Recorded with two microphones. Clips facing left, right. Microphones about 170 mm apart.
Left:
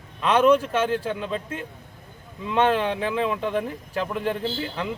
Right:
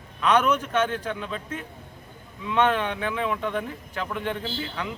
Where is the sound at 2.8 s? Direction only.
30° left (ahead or behind).